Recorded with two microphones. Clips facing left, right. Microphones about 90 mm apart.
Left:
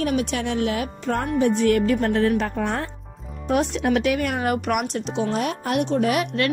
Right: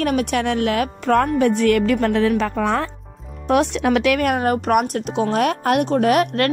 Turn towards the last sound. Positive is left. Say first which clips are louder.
# right 5 dB
turn(degrees=-50)  # may be behind; listen again after turning